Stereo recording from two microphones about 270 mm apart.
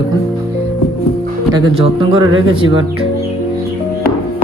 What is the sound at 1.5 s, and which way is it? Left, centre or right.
Speech, centre.